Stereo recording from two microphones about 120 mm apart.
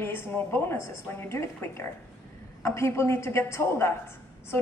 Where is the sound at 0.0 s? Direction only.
20° left (ahead or behind).